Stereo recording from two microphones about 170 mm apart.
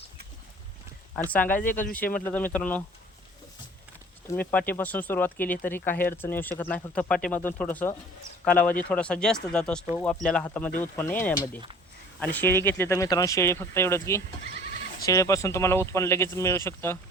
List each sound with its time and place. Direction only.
1.1 s speech: 10° left (ahead or behind)
4.3 s speech: 10° left (ahead or behind)